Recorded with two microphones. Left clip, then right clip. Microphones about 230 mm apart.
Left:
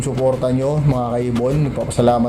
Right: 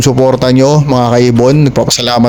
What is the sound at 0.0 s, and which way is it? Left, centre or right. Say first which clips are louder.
A man's voice: right 9 dB; right.